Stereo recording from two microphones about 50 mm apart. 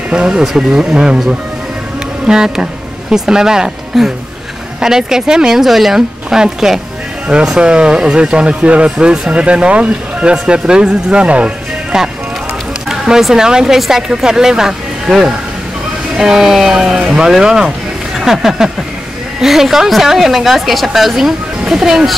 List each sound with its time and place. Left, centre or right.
0.1 s speech: centre
2.2 s speech: centre
12.8 s a sound: centre
13.3 s speech: centre